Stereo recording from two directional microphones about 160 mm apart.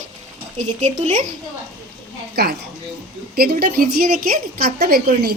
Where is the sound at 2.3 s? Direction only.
90° right.